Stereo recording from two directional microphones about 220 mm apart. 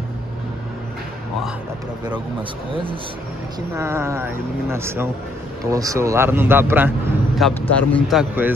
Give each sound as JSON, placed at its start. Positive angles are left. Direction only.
{"t": 2.7, "sound": "speech", "side_deg": -25}
{"t": 3.7, "sound": "speech", "side_deg": -10}
{"t": 7.3, "sound": "speech", "side_deg": 5}